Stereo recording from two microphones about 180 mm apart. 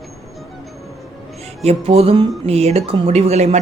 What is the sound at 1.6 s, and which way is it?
Speech, 35° right (ahead or behind).